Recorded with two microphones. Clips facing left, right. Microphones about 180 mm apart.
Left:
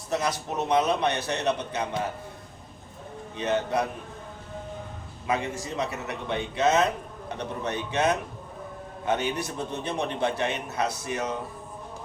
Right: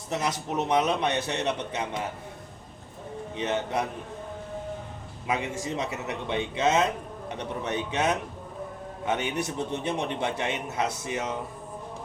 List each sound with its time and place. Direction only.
0.1 s a man's voice: 20° right (ahead or behind)
3.3 s a man's voice: 20° right (ahead or behind)
5.3 s a man's voice: 20° right (ahead or behind)